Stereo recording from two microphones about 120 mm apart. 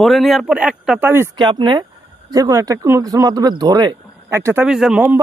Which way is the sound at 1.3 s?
40° right (ahead or behind).